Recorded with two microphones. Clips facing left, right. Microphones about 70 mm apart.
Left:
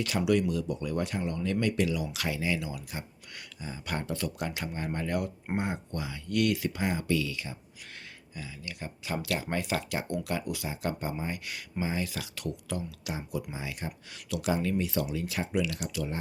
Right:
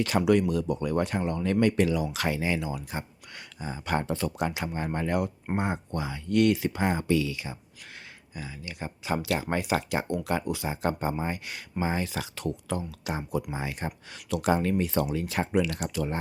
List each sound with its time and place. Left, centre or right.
0.0 s speech: right